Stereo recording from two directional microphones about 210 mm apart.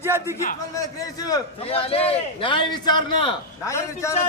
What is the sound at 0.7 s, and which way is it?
A man's voice, 15° left (ahead or behind).